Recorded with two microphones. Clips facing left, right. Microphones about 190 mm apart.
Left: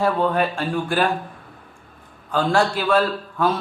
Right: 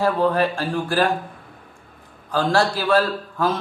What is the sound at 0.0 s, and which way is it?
Speech, 35° right (ahead or behind).